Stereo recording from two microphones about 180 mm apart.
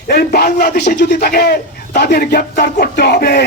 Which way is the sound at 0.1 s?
60° left (ahead or behind).